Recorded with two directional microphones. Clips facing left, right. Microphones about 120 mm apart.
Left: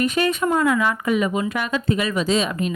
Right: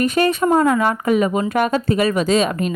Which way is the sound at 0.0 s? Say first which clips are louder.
Right 4 dB; 40° right (ahead or behind).